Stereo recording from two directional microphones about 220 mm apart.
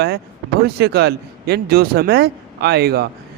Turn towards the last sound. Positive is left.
turn(degrees=-45)  # may be behind; listen again after turning